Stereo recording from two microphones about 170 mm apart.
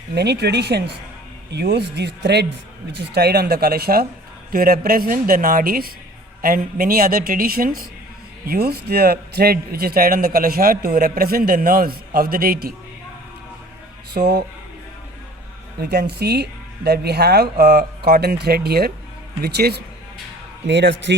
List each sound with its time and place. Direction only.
0.1 s a man's voice: 75° right (ahead or behind); by 12.7 s 60° right (ahead or behind)
14.1 s speech: 70° right (ahead or behind)
15.8 s speech: 70° right (ahead or behind)
20.7 s a man's voice: 90° right